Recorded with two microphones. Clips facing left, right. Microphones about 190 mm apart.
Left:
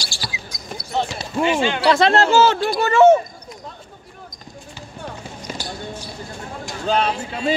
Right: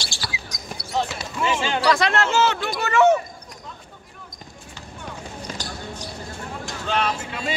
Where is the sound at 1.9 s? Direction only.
30° left (ahead or behind).